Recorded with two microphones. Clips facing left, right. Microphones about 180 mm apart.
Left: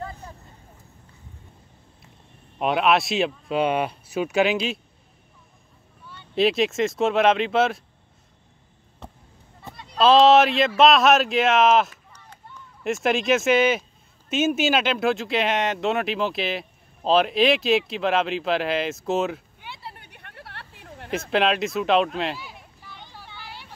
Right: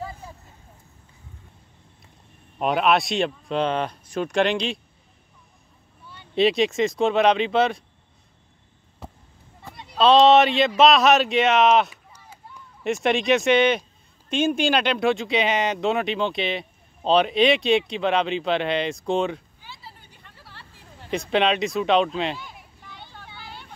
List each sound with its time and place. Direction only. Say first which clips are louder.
2.6 s speech: even; centre (ahead or behind)
6.3 s speech: right 1 dB; centre (ahead or behind)
9.0 s basketball bounce: right 1 dB; 5° right (ahead or behind)
9.8 s speech: even; centre (ahead or behind)
12.1 s a sound: right 1 dB; 5° right (ahead or behind)
12.8 s speech: right 1 dB; centre (ahead or behind)
19.6 s a sound: left 5 dB; 65° left (ahead or behind)
21.1 s speech: right 1 dB; centre (ahead or behind)
23.0 s vehicle: even; 10° left (ahead or behind)